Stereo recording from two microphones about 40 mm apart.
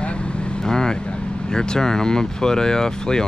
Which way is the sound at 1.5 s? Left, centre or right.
Centre.